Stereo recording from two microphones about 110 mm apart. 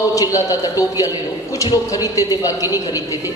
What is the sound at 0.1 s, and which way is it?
A man's voice, 30° left (ahead or behind).